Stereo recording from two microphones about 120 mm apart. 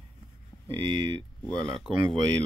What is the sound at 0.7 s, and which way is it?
Speech, 45° right (ahead or behind).